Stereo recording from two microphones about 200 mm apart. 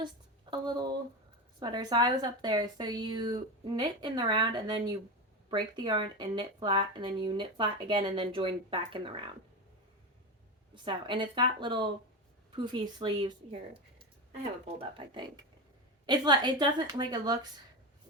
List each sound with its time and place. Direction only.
0.5 s speech: 20° right (ahead or behind)
10.8 s speech: 25° right (ahead or behind)
14.8 s speech: 25° right (ahead or behind)